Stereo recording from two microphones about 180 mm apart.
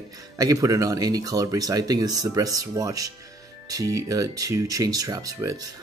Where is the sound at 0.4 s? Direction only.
20° right (ahead or behind).